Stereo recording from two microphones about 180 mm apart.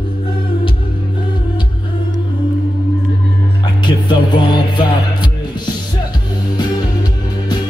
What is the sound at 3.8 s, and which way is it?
Music, 25° left (ahead or behind).